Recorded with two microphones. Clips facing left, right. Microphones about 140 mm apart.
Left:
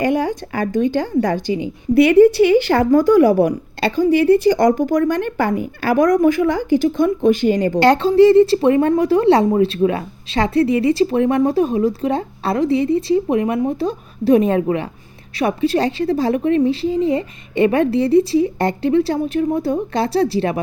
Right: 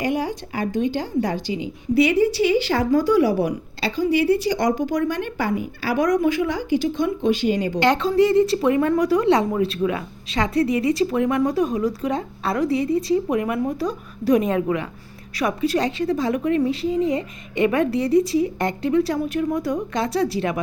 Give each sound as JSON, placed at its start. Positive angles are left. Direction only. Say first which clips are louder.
{"t": 0.0, "sound": "a woman's voice", "louder": "left 5 dB", "side_deg": 55}